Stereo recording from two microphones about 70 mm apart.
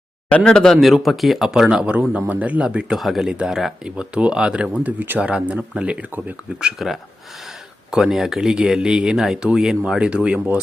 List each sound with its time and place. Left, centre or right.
0.3 s speech: centre
1.9 s speech: right
2.6 s speech: centre
3.3 s speech: centre
6.7 s speech: centre